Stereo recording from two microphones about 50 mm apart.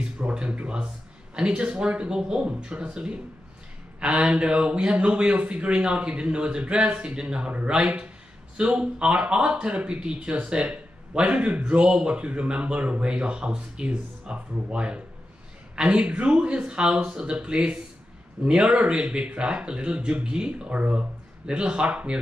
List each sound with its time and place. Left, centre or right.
0.3 s speech: right